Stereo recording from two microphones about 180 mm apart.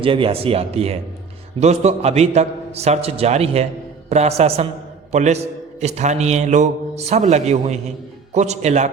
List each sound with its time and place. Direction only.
0.0 s a man's voice: 30° right (ahead or behind)